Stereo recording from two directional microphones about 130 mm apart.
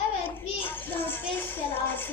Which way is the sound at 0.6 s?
15° left (ahead or behind).